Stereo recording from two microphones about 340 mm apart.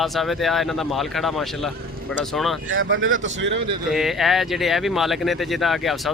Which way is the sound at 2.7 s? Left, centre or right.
Right.